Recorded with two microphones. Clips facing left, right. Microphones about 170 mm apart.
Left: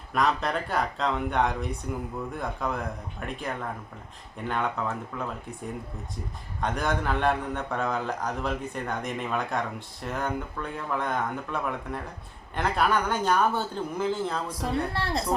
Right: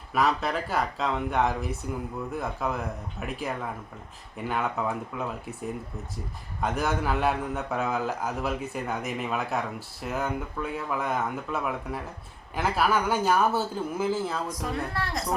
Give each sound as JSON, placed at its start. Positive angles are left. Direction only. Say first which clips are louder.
{"t": 0.1, "sound": "a man's voice", "louder": "even", "side_deg": -5}
{"t": 6.6, "sound": "a man's voice", "louder": "right 1 dB", "side_deg": -5}
{"t": 14.6, "sound": "speech", "louder": "left 2 dB", "side_deg": 30}